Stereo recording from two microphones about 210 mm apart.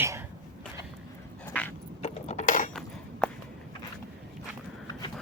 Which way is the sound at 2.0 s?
30° left (ahead or behind).